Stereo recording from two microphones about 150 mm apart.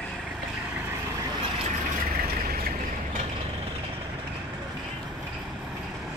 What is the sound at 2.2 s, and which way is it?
Vehicle, 85° right.